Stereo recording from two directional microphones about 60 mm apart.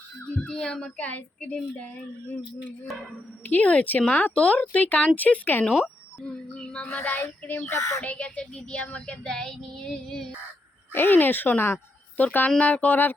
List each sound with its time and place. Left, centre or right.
0.2 s speech: centre
3.4 s child singing: left
6.2 s child singing: centre
7.7 s speech: left
8.0 s child singing: left
9.0 s speech: centre
10.9 s speech: left
12.5 s child singing: left